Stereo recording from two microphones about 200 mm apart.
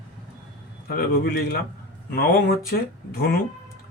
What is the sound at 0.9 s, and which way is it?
Speech, 50° left (ahead or behind).